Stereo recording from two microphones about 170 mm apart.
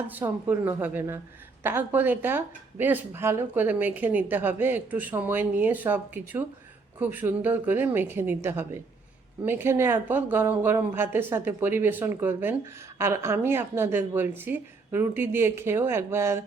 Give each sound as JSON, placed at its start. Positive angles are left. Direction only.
{"t": 0.1, "sound": "speech", "side_deg": -10}